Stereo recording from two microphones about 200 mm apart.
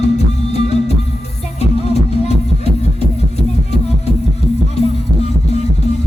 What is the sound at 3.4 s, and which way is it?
Music, 35° left (ahead or behind).